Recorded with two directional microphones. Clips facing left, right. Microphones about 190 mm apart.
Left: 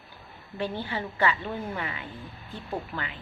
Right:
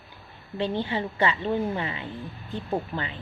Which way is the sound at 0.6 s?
20° right (ahead or behind).